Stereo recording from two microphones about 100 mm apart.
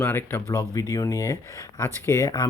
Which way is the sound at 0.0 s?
20° left (ahead or behind).